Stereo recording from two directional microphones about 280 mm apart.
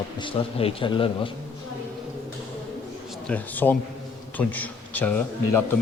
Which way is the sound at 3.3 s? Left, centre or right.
Centre.